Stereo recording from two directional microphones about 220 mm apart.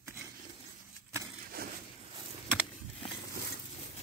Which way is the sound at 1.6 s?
45° right (ahead or behind).